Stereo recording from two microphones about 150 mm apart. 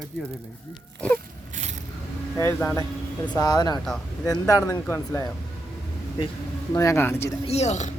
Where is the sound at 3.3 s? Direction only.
25° left (ahead or behind).